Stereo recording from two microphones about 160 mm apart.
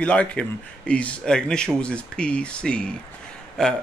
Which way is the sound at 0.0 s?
5° left (ahead or behind).